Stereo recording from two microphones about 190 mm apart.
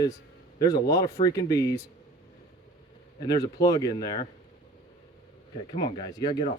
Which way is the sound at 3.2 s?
20° left (ahead or behind).